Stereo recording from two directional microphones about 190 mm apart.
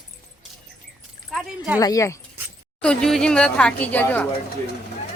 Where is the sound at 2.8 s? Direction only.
5° left (ahead or behind).